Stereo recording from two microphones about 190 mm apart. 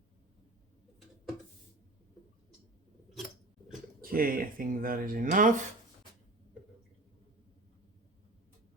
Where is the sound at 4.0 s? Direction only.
50° right (ahead or behind).